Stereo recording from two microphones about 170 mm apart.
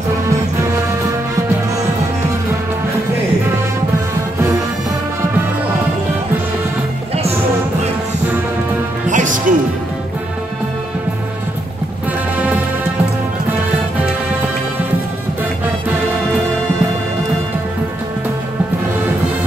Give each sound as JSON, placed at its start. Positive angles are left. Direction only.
{"t": 9.1, "sound": "music", "side_deg": -50}